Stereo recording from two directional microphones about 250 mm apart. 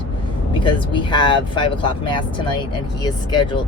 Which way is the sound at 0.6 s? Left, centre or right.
Centre.